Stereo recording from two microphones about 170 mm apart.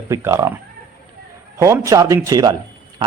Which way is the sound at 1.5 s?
20° right (ahead or behind).